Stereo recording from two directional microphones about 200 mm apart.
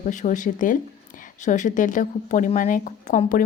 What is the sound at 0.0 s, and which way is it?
A woman's voice, 40° left (ahead or behind).